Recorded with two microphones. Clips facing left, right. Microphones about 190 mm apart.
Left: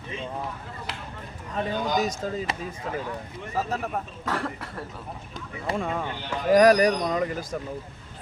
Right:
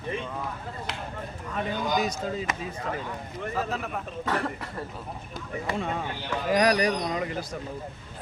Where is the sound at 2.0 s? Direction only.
45° left (ahead or behind).